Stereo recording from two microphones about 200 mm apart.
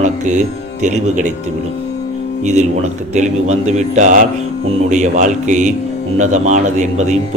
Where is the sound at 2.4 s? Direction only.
35° right (ahead or behind).